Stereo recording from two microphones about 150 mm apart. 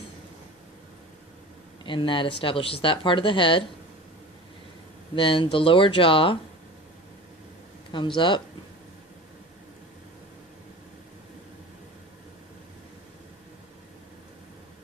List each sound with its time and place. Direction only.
1.8 s speech: 35° left (ahead or behind)
5.1 s speech: 35° left (ahead or behind)
7.9 s speech: 35° left (ahead or behind)